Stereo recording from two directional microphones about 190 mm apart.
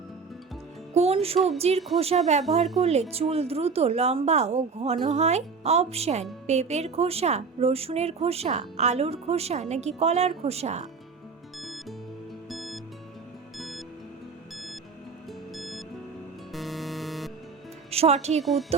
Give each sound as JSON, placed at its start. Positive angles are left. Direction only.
{"t": 0.9, "sound": "a woman's voice", "side_deg": -30}
{"t": 11.6, "sound": "music", "side_deg": 0}
{"t": 17.9, "sound": "a woman's voice", "side_deg": -35}